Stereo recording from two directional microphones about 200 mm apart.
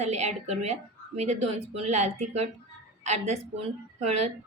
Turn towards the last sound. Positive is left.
turn(degrees=-35)  # may be behind; listen again after turning